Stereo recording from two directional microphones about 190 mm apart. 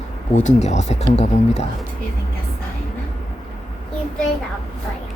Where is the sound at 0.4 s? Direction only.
40° left (ahead or behind).